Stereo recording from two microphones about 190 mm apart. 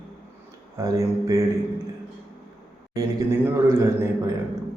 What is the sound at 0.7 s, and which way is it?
Speech, 15° right (ahead or behind).